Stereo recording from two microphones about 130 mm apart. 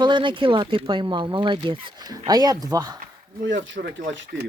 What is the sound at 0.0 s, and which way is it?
Speech, 40° right (ahead or behind).